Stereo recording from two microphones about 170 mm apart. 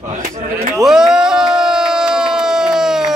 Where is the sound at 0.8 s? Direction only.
5° right (ahead or behind).